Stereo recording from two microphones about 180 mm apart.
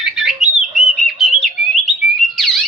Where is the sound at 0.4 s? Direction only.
Centre (ahead or behind).